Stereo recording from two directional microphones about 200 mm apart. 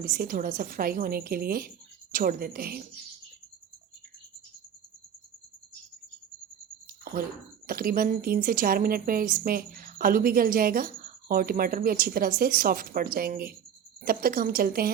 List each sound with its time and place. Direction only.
0.0 s a woman's voice: 45° right (ahead or behind)
7.0 s a sound: 50° right (ahead or behind)
7.7 s a woman's voice: 45° right (ahead or behind)